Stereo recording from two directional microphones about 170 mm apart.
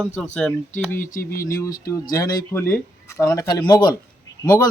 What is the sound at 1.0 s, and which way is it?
Speech, 50° left (ahead or behind).